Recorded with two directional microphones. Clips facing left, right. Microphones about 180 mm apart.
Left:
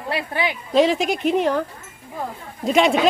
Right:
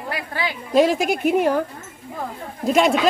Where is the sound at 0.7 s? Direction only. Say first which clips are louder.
Right 1 dB; 5° right (ahead or behind).